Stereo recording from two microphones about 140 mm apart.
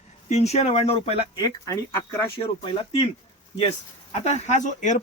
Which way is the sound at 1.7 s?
20° left (ahead or behind).